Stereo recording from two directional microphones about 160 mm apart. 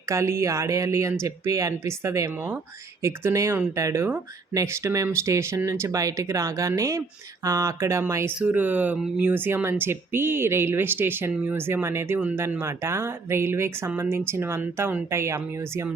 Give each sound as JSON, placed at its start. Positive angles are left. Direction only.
{"t": 0.1, "sound": "speech", "side_deg": -15}